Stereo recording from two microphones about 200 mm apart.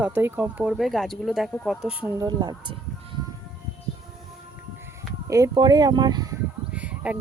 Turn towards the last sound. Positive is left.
turn(degrees=-5)  # may be behind; listen again after turning